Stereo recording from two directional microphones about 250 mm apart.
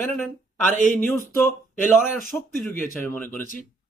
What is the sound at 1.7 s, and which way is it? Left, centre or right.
A man's voice, centre.